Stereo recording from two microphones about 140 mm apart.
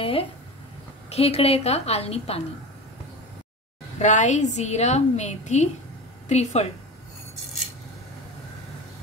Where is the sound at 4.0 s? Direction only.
60° left (ahead or behind).